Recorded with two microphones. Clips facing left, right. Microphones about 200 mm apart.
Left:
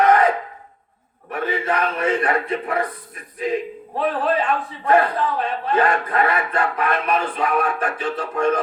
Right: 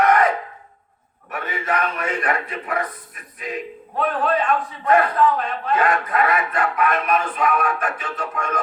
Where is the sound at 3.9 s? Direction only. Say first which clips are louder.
Even; 30° left (ahead or behind).